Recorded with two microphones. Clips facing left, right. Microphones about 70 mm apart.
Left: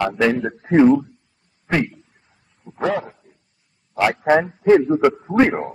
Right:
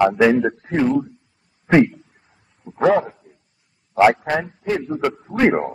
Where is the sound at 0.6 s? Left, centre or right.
Left.